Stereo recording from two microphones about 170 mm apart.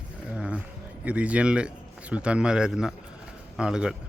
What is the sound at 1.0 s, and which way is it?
Speech, 5° right (ahead or behind).